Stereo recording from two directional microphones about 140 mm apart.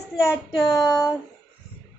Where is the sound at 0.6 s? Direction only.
25° left (ahead or behind).